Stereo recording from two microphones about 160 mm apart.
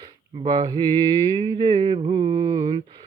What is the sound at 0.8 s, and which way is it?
Mantra, 30° right (ahead or behind).